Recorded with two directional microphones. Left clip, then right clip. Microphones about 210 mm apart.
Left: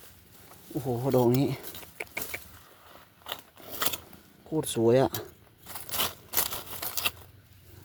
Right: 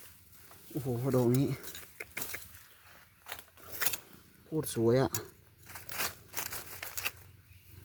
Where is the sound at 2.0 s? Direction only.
5° left (ahead or behind).